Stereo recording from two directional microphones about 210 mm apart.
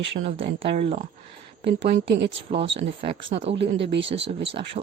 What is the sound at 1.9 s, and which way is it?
Speech, 50° right (ahead or behind).